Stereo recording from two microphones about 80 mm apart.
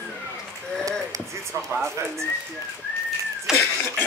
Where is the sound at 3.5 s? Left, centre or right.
Centre.